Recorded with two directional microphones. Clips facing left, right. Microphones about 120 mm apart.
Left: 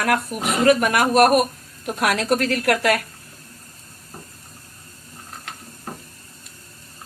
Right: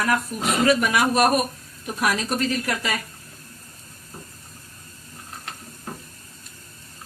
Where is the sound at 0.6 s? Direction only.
50° left (ahead or behind); by 3.0 s 70° left (ahead or behind).